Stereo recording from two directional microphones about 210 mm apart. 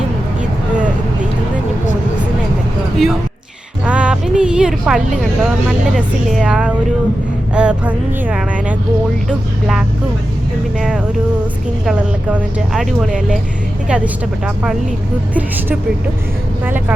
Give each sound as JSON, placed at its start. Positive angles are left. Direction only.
{"t": 3.8, "sound": "speech", "side_deg": -5}
{"t": 10.8, "sound": "speech", "side_deg": -5}